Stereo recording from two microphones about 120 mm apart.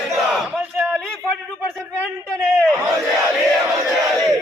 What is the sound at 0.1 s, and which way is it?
Battle cry, centre (ahead or behind).